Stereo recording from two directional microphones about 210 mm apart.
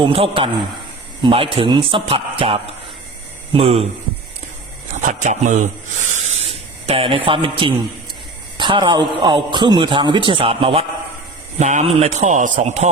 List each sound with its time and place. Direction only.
0.0 s a man's voice: 25° right (ahead or behind)
5.0 s speech: 35° right (ahead or behind)
6.1 s spray: 30° right (ahead or behind)
8.5 s a man's voice: 20° right (ahead or behind)